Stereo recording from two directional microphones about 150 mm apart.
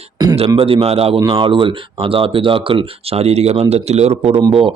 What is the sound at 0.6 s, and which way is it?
Speech, 40° right (ahead or behind).